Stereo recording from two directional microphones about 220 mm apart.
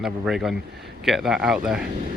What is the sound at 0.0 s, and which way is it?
Speech, centre (ahead or behind).